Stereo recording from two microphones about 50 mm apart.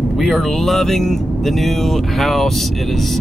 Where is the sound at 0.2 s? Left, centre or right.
Centre.